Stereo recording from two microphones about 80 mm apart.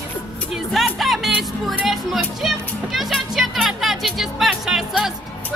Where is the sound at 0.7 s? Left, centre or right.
Centre.